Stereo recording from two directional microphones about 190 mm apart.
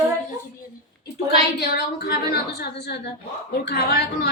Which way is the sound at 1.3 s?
60° left (ahead or behind).